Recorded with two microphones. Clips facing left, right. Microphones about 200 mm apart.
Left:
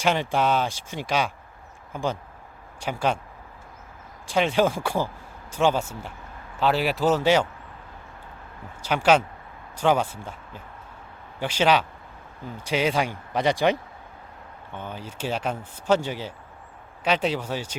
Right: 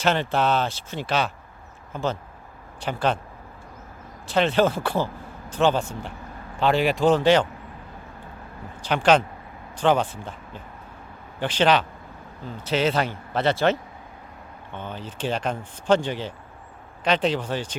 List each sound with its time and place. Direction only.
0.0 s speech: 10° left (ahead or behind)
4.3 s a man's voice: 10° left (ahead or behind)
8.8 s speech: 10° left (ahead or behind)
14.8 s speech: 10° left (ahead or behind)